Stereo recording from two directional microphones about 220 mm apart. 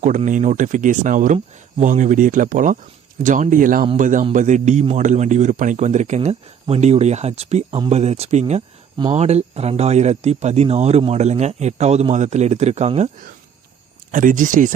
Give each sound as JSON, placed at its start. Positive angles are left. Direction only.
{"t": 0.0, "sound": "a man's voice", "side_deg": -35}